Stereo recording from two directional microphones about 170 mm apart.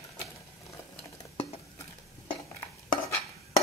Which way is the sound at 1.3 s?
35° left (ahead or behind).